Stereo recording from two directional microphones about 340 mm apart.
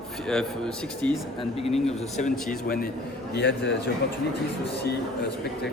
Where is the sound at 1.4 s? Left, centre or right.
Centre; by 3.8 s left.